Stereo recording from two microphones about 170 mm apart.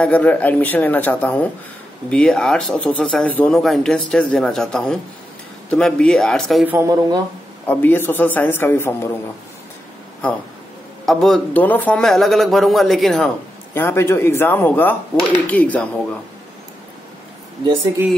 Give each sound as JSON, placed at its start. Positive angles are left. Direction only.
{"t": 0.0, "sound": "a man's voice", "side_deg": 10}
{"t": 6.6, "sound": "speech", "side_deg": -15}
{"t": 7.6, "sound": "a man's voice", "side_deg": 10}
{"t": 11.1, "sound": "speech", "side_deg": 0}
{"t": 13.7, "sound": "a man's voice", "side_deg": 15}